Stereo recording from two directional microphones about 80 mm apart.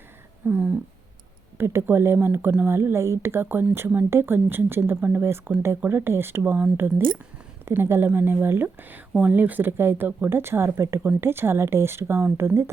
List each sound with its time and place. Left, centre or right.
0.4 s a sound: right
1.5 s speech: right
5.9 s speech: right